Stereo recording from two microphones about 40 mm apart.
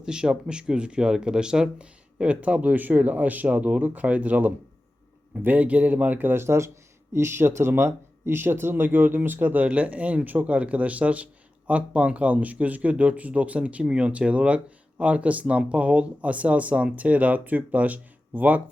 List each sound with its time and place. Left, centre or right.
0.0 s speech: centre; by 6.3 s right
7.2 s speech: right
13.8 s speech: right
14.1 s speech: right